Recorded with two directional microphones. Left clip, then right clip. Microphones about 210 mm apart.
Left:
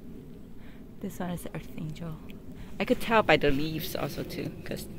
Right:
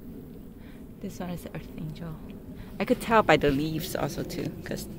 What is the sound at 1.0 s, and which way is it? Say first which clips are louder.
A woman's voice: left 1 dB; 30° left (ahead or behind).